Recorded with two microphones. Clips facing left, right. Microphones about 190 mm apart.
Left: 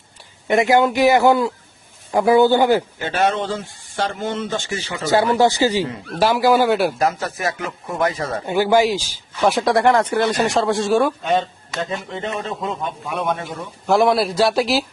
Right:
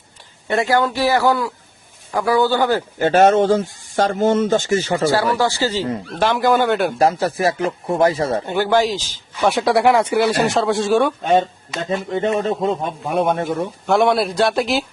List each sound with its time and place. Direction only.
0.4 s a man's voice: 15° left (ahead or behind)
3.0 s speech: 45° right (ahead or behind)
5.1 s a man's voice: 20° left (ahead or behind); by 6.9 s 5° left (ahead or behind)
7.0 s speech: 30° right (ahead or behind)
8.4 s a man's voice: 10° left (ahead or behind)
9.4 s speech: centre (ahead or behind)
11.2 s speech: 45° right (ahead or behind)
13.8 s speech: centre (ahead or behind)